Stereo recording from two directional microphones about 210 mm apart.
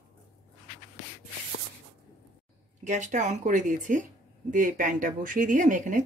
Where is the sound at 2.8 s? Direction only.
35° right (ahead or behind).